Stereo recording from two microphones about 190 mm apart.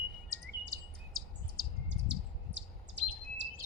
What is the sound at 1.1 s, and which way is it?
Chirp, 50° right (ahead or behind).